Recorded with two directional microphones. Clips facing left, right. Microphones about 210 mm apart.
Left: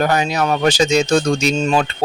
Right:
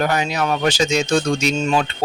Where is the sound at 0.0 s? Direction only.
40° left (ahead or behind).